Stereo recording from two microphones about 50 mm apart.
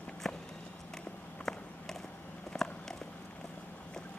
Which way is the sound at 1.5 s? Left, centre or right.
Centre.